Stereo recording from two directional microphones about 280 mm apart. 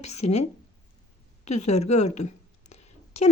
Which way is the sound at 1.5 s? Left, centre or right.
Left.